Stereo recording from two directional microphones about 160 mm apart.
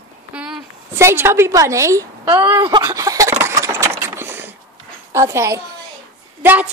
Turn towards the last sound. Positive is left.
turn(degrees=-10)  # may be behind; listen again after turning